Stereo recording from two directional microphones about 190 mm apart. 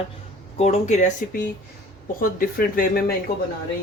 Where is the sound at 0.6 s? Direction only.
35° left (ahead or behind).